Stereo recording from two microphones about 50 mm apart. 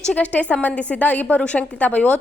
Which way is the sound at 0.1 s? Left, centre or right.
Left.